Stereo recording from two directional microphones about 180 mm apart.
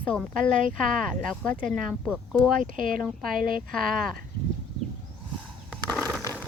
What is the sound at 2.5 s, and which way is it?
Speech, 50° right (ahead or behind).